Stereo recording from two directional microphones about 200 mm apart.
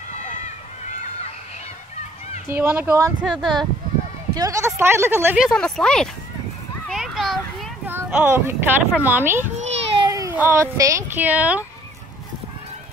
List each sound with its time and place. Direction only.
2.5 s speech: 10° right (ahead or behind)
3.3 s speech: centre (ahead or behind)
4.4 s speech: 15° right (ahead or behind); by 6.0 s 5° left (ahead or behind)
6.9 s children playing: centre (ahead or behind)
7.8 s speech: 10° right (ahead or behind)